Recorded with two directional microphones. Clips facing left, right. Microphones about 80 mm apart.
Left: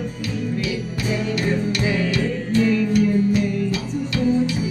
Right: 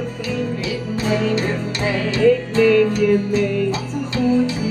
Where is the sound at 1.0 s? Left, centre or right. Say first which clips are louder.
Right 3 dB; right.